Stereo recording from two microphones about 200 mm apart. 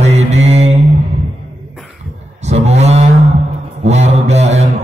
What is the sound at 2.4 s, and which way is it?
Mantra, 35° right (ahead or behind).